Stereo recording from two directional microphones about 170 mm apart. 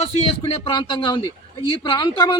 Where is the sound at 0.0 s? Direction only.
30° left (ahead or behind).